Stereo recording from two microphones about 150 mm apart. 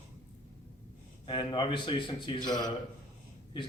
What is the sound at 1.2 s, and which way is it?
A man's voice, 35° left (ahead or behind).